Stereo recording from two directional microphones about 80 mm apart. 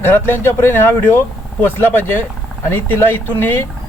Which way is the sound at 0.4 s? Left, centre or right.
Left.